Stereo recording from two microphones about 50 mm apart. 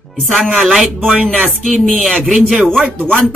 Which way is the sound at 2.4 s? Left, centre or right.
Centre.